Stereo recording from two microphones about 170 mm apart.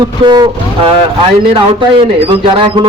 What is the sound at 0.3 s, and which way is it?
Speech, 30° right (ahead or behind).